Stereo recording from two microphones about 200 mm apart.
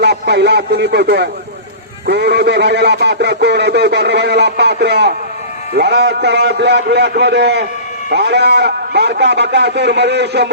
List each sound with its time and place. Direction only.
0.0 s speech: 55° right (ahead or behind)